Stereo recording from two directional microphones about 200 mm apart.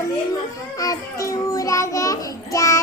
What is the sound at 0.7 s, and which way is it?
Child singing, 15° left (ahead or behind).